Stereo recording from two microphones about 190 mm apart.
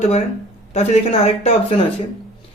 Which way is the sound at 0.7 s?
35° left (ahead or behind).